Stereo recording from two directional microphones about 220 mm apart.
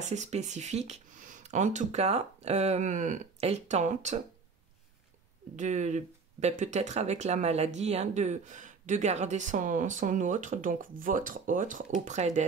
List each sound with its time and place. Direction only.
0.0 s speech: 30° right (ahead or behind)
5.6 s speech: 35° right (ahead or behind)